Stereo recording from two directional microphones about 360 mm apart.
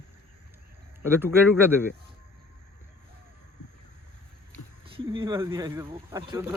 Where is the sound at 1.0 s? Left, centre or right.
Centre.